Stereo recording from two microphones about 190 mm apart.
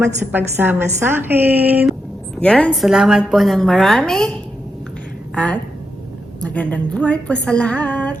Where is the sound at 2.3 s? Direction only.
5° left (ahead or behind).